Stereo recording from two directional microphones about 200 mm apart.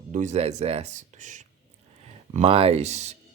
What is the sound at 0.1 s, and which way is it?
Speech, 35° right (ahead or behind).